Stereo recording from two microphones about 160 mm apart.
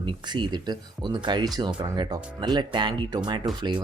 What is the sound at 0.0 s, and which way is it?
Speech, 30° right (ahead or behind).